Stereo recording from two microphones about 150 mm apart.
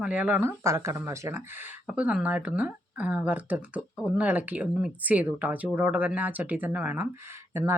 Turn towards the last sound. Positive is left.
turn(degrees=-15)  # may be behind; listen again after turning